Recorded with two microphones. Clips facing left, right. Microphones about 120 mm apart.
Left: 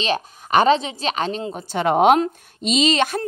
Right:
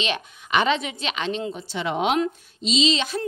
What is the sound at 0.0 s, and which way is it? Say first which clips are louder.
A woman's voice: left 5 dB; 40° left (ahead or behind).